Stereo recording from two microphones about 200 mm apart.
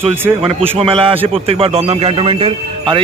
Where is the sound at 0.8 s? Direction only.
30° right (ahead or behind).